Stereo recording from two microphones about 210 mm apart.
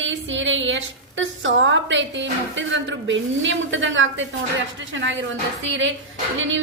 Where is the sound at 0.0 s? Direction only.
65° right (ahead or behind).